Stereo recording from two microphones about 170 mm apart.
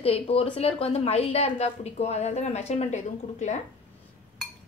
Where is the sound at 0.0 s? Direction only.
35° left (ahead or behind).